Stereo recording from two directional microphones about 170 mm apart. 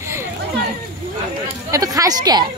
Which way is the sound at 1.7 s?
20° right (ahead or behind).